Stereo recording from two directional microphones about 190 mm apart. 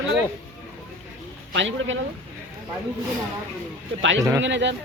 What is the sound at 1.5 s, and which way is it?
Speech, 75° right (ahead or behind).